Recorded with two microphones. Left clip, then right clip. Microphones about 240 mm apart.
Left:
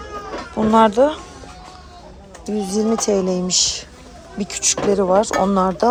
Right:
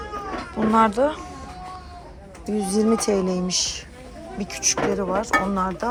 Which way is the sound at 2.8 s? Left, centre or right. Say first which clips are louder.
Left 3 dB; centre.